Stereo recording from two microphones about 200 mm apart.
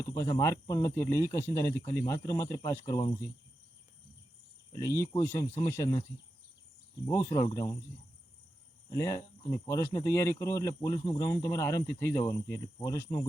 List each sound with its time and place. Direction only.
0.2 s speech: 15° left (ahead or behind)
4.7 s speech: 15° left (ahead or behind)
7.1 s speech: 15° left (ahead or behind)
8.9 s speech: 15° left (ahead or behind)